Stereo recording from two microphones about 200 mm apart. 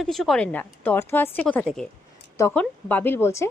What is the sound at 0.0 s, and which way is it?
Speech, centre (ahead or behind).